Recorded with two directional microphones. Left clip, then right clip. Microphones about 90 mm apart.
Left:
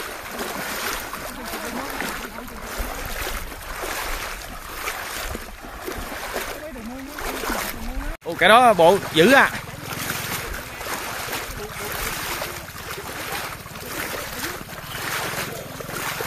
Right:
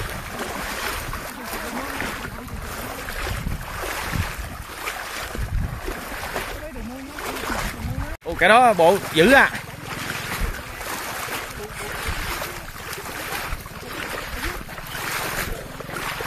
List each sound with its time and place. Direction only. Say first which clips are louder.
7.2 s a sound: left 1 dB; centre (ahead or behind)
8.4 s speech: left 1 dB; 25° left (ahead or behind)
8.8 s speech: left 1 dB; 10° left (ahead or behind)